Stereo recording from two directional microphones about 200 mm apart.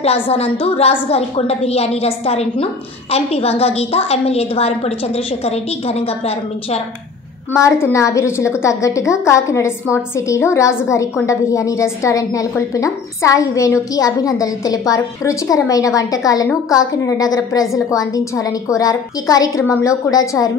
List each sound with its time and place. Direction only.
0.0 s a woman's voice: 30° left (ahead or behind)
7.5 s a woman's voice: 15° left (ahead or behind)